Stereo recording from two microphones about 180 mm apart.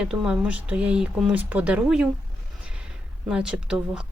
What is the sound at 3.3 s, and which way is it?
Speech, 5° right (ahead or behind).